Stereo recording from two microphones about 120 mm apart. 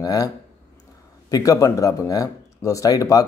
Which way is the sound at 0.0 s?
30° left (ahead or behind).